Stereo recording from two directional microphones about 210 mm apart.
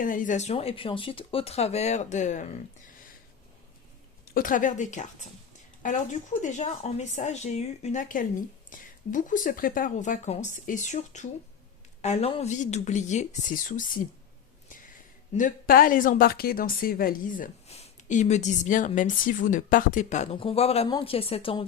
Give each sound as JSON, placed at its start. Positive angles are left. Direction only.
{"t": 0.0, "sound": "speech", "side_deg": 40}
{"t": 4.4, "sound": "speech", "side_deg": 40}
{"t": 15.3, "sound": "speech", "side_deg": 40}